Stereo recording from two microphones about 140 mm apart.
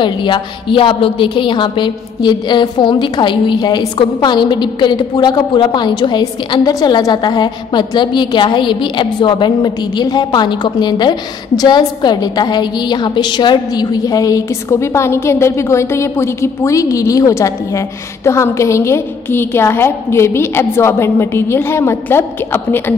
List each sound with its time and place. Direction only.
0.0 s a woman's voice: 35° left (ahead or behind); by 22.9 s 15° left (ahead or behind)